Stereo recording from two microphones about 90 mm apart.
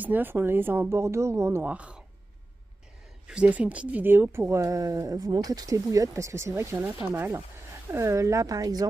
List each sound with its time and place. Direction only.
0.0 s speech: 20° right (ahead or behind)
1.7 s speech: 10° right (ahead or behind)
3.3 s speech: 15° right (ahead or behind); by 8.8 s 45° right (ahead or behind)